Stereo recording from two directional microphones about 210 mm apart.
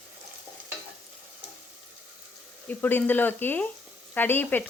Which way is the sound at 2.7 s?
10° left (ahead or behind).